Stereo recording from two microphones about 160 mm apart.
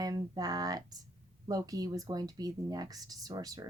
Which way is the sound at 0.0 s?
25° right (ahead or behind).